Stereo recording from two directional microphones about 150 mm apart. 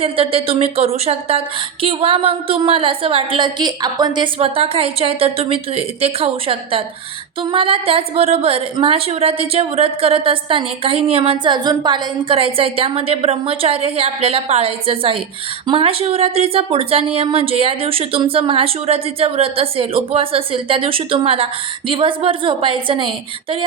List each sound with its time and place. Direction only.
0.0 s a woman's voice: 40° right (ahead or behind)
4.4 s a woman's voice: 40° right (ahead or behind)